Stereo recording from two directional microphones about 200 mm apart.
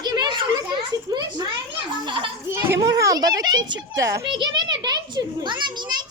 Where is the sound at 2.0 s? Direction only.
25° right (ahead or behind).